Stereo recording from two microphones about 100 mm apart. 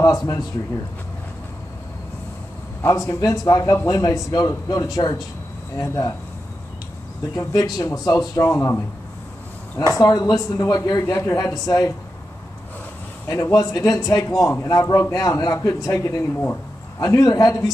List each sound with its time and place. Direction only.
2.9 s a man's voice: 35° left (ahead or behind)
7.3 s a man's voice: 40° left (ahead or behind)
9.9 s a man's voice: 35° left (ahead or behind)
13.3 s a man's voice: 35° left (ahead or behind)